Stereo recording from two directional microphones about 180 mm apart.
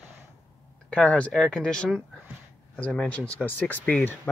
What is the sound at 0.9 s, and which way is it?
Speech, 5° left (ahead or behind).